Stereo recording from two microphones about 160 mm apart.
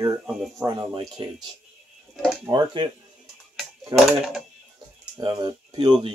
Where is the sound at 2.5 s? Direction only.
30° right (ahead or behind).